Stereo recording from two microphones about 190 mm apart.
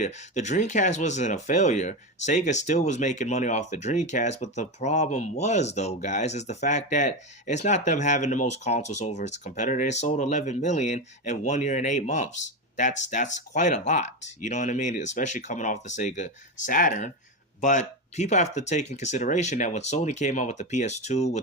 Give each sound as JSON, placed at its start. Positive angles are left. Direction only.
{"t": 0.0, "sound": "speech", "side_deg": 35}